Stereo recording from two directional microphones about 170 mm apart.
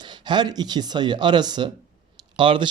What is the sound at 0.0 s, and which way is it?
Speech, 25° right (ahead or behind).